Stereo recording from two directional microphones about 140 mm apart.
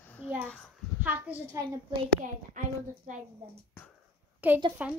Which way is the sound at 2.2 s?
65° right (ahead or behind).